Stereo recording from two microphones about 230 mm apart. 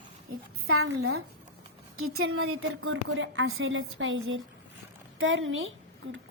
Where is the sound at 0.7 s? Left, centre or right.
Right.